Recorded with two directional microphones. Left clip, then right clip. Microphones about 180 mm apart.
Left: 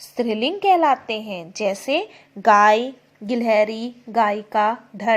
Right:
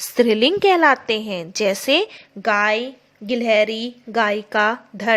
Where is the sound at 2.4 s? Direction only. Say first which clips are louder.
Left 4 dB; centre (ahead or behind).